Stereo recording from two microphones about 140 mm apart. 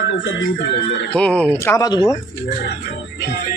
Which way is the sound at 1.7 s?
25° left (ahead or behind).